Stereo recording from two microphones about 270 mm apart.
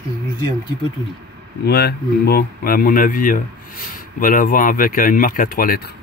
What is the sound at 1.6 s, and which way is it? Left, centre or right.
Speech, left.